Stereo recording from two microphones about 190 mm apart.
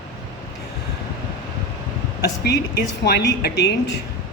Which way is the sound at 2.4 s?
60° left (ahead or behind).